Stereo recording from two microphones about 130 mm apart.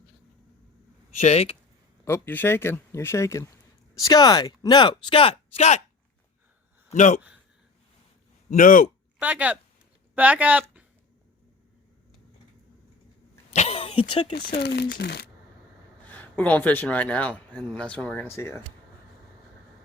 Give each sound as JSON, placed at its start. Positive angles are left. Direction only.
{"t": 1.2, "sound": "speech", "side_deg": 55}
{"t": 2.0, "sound": "speech", "side_deg": 20}
{"t": 6.9, "sound": "a man's voice", "side_deg": 70}
{"t": 8.4, "sound": "speech", "side_deg": 90}
{"t": 9.2, "sound": "speech", "side_deg": -10}
{"t": 13.5, "sound": "a sound", "side_deg": 55}
{"t": 16.0, "sound": "speech", "side_deg": 10}